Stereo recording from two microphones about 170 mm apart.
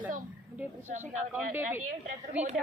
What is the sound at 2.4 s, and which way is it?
Speech, 10° right (ahead or behind).